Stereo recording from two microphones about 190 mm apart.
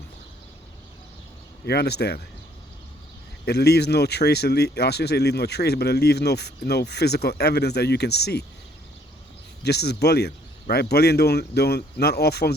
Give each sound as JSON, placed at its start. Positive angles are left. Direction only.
{"t": 1.6, "sound": "speech", "side_deg": 60}
{"t": 3.4, "sound": "speech", "side_deg": 60}
{"t": 9.6, "sound": "speech", "side_deg": 60}